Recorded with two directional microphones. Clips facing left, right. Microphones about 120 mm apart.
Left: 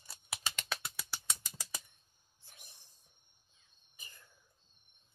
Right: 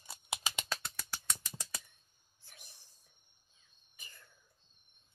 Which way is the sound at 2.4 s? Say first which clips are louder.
Right 1 dB; 20° left (ahead or behind).